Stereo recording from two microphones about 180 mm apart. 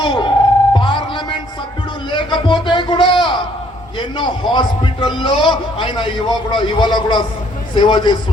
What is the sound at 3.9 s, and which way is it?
A man's voice, 25° left (ahead or behind).